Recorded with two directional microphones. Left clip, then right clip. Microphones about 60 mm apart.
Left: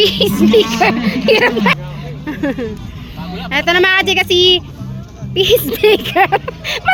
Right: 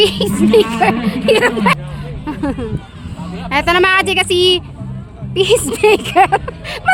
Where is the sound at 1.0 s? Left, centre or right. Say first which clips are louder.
Left 1 dB; left.